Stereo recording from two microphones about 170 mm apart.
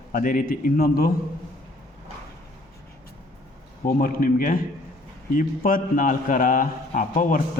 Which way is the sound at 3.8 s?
55° left (ahead or behind).